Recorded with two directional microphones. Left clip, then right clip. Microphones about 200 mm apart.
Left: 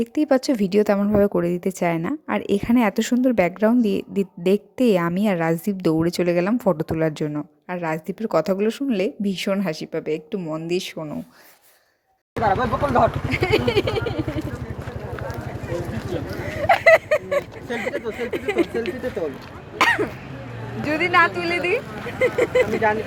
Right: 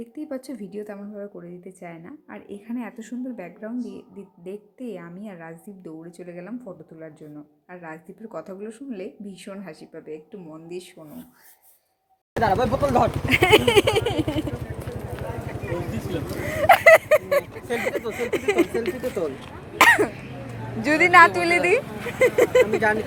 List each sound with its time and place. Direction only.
0.0 s speech: 45° left (ahead or behind)
12.4 s speech: 50° right (ahead or behind)
13.3 s speech: 15° right (ahead or behind)
16.3 s a sound: 15° right (ahead or behind)
17.7 s speech: 15° right (ahead or behind)
19.8 s throat clearing: 15° right (ahead or behind)
20.8 s speech: 15° right (ahead or behind)